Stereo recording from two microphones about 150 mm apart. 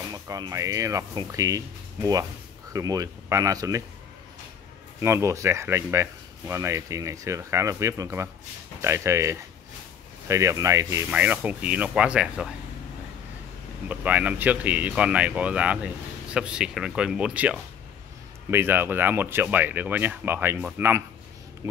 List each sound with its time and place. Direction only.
0.1 s speech: 25° right (ahead or behind)
2.7 s speech: 25° right (ahead or behind)
5.0 s speech: 20° right (ahead or behind)
13.8 s speech: 10° right (ahead or behind)